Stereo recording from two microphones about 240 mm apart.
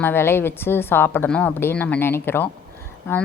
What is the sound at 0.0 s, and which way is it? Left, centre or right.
A woman's voice, centre.